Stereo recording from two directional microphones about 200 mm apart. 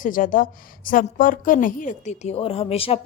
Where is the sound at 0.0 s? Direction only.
45° left (ahead or behind).